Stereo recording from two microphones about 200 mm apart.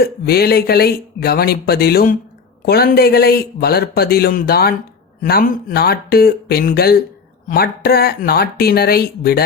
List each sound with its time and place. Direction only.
0.0 s speech: 50° left (ahead or behind)